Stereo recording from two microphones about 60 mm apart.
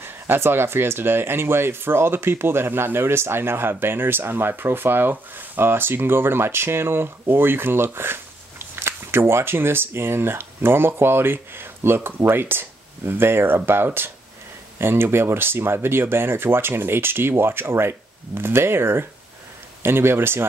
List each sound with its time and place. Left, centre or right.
0.0 s speech: right